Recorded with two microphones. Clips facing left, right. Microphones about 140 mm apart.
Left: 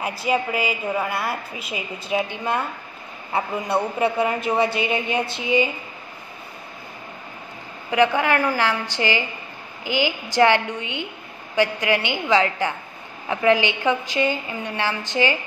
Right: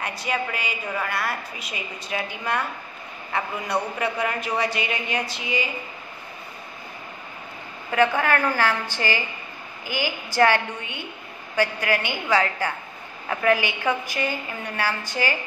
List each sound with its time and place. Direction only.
0.2 s a woman's voice: 25° left (ahead or behind)
3.3 s a woman's voice: 25° left (ahead or behind)
7.9 s a woman's voice: 15° left (ahead or behind)